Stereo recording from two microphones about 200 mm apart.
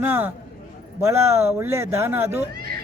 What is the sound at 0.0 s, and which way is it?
A man's voice, 10° right (ahead or behind).